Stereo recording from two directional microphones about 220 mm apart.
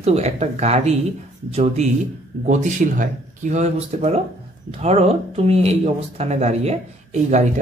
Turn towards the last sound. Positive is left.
turn(degrees=-30)  # may be behind; listen again after turning